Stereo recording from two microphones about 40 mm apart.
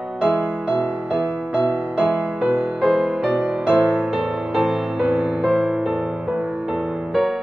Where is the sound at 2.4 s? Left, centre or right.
Right.